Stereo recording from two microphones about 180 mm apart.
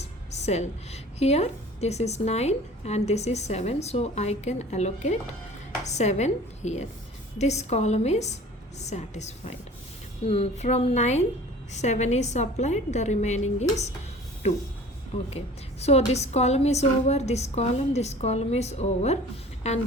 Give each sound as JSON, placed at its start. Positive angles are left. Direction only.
{"t": 0.0, "sound": "a woman's voice", "side_deg": 40}
{"t": 15.3, "sound": "a woman's voice", "side_deg": 35}